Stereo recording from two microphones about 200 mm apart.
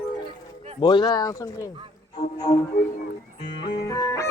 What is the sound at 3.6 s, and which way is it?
Music, 20° left (ahead or behind).